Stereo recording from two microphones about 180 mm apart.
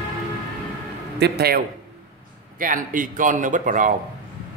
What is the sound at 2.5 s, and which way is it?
Speech, 50° right (ahead or behind).